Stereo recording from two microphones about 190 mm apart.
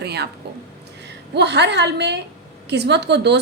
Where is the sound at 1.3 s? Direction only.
65° right (ahead or behind).